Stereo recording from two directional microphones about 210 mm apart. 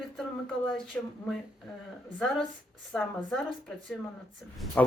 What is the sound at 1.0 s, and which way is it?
Speech, 5° left (ahead or behind).